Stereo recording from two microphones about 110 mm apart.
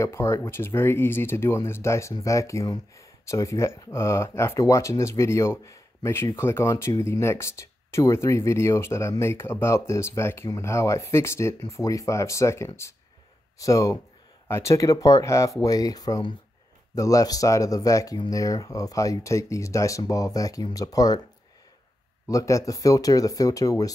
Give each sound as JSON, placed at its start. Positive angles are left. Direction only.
{"t": 0.0, "sound": "speech", "side_deg": 25}
{"t": 22.3, "sound": "speech", "side_deg": 30}